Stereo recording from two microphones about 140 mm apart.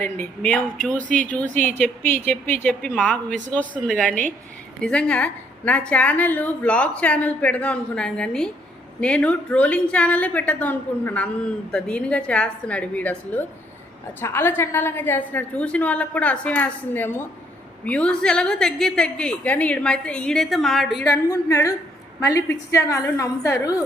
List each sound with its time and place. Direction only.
0.0 s a woman's voice: 10° left (ahead or behind)
1.6 s a woman's voice: 10° left (ahead or behind)
21.0 s a woman's voice: 25° left (ahead or behind)